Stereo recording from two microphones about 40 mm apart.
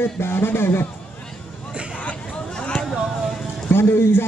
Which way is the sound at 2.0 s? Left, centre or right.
Left.